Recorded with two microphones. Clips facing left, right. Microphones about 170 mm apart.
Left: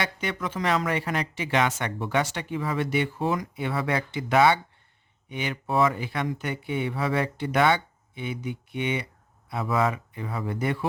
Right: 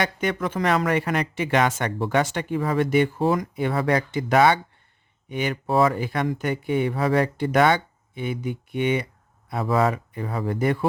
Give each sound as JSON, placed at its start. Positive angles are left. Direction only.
{"t": 0.0, "sound": "speech", "side_deg": -50}
{"t": 9.5, "sound": "speech", "side_deg": -40}